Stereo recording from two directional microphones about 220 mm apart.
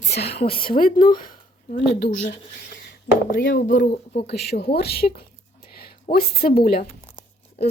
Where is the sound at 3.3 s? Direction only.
40° left (ahead or behind).